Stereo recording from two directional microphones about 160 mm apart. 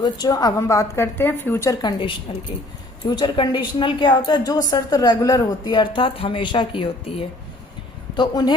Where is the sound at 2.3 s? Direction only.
35° left (ahead or behind).